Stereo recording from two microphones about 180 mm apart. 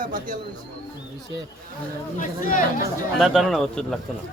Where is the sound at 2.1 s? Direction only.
45° left (ahead or behind).